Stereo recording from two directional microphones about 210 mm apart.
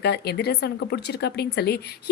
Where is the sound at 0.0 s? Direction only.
50° left (ahead or behind).